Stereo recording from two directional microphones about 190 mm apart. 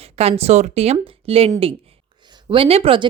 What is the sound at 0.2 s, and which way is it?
Speech, 35° right (ahead or behind).